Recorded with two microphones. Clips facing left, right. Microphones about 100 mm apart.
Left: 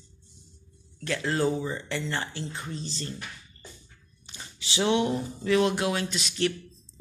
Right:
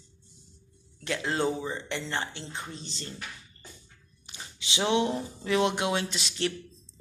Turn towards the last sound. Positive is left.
turn(degrees=-25)  # may be behind; listen again after turning